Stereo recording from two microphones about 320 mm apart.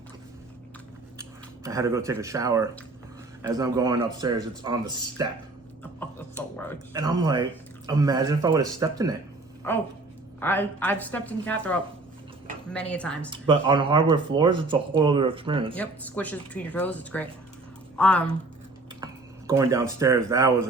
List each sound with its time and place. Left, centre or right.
1.2 s speech: centre
6.0 s a sound: centre
6.9 s speech: centre
9.6 s speech: centre
13.3 s speech: centre
15.7 s speech: centre
19.5 s speech: centre